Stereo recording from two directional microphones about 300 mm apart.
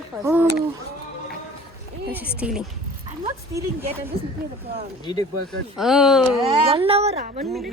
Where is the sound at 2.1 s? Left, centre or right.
Centre.